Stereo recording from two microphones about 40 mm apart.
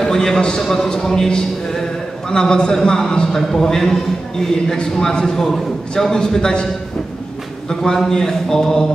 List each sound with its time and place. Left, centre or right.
0.0 s a man's voice: centre
7.8 s a man's voice: centre